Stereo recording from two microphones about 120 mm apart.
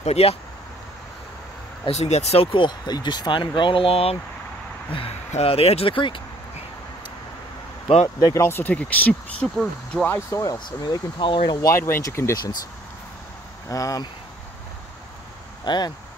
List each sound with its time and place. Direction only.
0.0 s speech: 60° left (ahead or behind)
1.9 s speech: 65° left (ahead or behind)
5.3 s speech: 55° left (ahead or behind)
8.2 s speech: 25° left (ahead or behind)
10.4 s speech: 35° left (ahead or behind)
11.7 s speech: 25° left (ahead or behind)
13.7 s speech: 30° left (ahead or behind)
15.6 s speech: 40° left (ahead or behind)